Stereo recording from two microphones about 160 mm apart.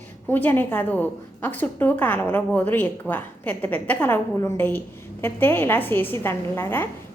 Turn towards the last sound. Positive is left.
turn(degrees=15)  # may be behind; listen again after turning